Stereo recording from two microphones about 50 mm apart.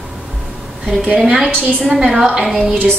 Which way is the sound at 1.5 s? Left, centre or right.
Left.